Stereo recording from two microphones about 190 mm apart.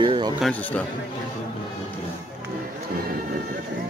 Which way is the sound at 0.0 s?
25° right (ahead or behind).